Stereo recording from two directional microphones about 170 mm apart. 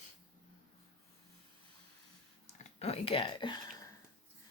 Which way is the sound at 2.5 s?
35° left (ahead or behind).